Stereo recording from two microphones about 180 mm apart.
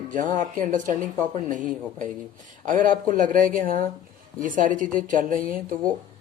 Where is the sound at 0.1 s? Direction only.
45° right (ahead or behind).